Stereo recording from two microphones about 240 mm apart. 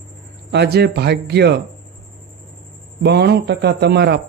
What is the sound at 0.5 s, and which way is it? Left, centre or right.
A man's voice, right.